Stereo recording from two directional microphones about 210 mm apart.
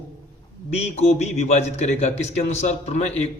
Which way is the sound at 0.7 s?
30° left (ahead or behind).